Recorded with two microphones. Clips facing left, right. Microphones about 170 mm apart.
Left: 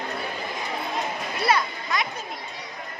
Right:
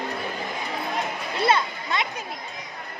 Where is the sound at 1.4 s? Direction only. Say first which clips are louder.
Right 1 dB; 25° right (ahead or behind).